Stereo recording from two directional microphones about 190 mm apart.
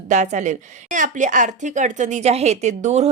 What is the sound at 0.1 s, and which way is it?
A woman's voice, 40° right (ahead or behind).